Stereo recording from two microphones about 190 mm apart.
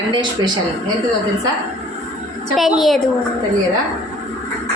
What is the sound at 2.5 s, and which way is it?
Speech, centre (ahead or behind).